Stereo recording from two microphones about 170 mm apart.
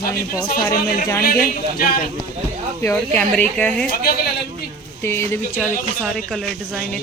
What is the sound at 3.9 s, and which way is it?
Speech, 60° left (ahead or behind).